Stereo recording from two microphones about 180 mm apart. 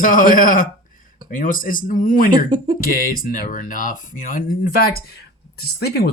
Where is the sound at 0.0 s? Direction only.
50° left (ahead or behind).